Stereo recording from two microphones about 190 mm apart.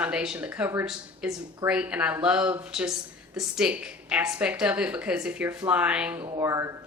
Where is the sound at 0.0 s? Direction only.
5° right (ahead or behind).